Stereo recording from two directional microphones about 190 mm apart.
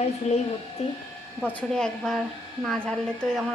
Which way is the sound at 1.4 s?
5° left (ahead or behind).